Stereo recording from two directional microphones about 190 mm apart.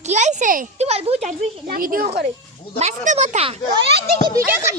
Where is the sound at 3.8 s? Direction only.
60° right (ahead or behind).